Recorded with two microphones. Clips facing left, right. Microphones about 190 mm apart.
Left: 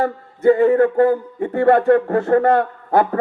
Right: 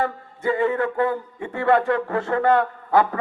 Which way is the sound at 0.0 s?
50° left (ahead or behind).